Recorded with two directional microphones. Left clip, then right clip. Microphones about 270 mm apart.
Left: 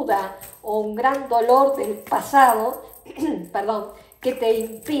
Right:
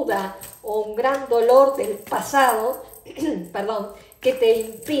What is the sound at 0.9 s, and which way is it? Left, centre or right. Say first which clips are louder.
A woman's voice: even; centre.